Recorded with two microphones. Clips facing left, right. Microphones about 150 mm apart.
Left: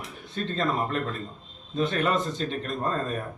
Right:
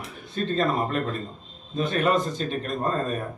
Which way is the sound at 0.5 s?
15° right (ahead or behind).